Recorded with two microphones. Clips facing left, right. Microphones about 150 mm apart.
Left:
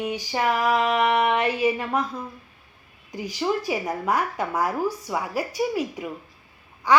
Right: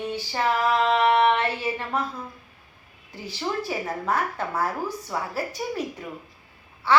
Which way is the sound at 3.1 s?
15° left (ahead or behind).